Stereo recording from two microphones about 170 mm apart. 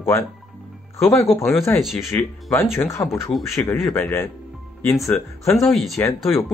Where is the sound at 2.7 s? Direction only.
15° left (ahead or behind).